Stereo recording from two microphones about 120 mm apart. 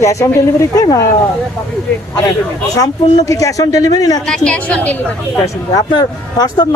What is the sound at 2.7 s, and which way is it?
Speech, 30° left (ahead or behind).